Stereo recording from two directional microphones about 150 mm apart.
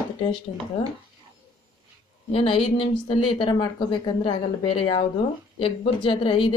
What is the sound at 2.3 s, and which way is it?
A woman's voice, 35° left (ahead or behind).